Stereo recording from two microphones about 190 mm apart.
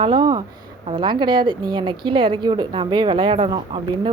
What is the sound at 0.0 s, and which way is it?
Speech, 25° right (ahead or behind).